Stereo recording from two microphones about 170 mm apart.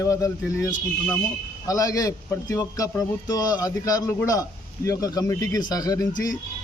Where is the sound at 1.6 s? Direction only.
20° left (ahead or behind).